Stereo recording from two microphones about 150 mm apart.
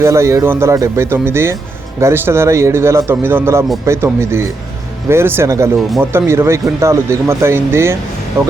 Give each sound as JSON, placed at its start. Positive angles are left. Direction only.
{"t": 0.0, "sound": "speech", "side_deg": -20}